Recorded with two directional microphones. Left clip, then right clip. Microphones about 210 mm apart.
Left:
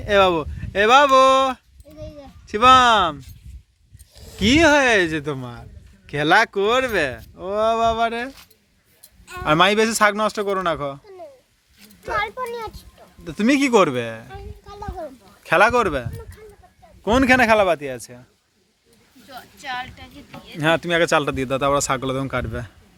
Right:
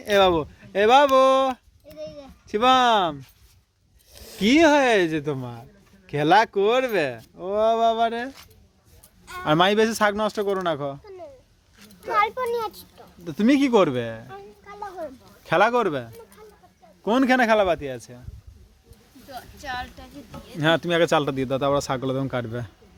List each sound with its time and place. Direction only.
0.0 s speech: centre (ahead or behind)
4.1 s a sound: 30° right (ahead or behind)
4.4 s speech: 5° right (ahead or behind)
9.4 s speech: centre (ahead or behind)
12.1 s a child's voice: 25° right (ahead or behind)
12.4 s a child's voice: 40° right (ahead or behind)
13.2 s a child's voice: 5° right (ahead or behind); by 18.2 s 10° left (ahead or behind)
19.3 s speech: 20° right (ahead or behind)
20.6 s speech: 5° right (ahead or behind)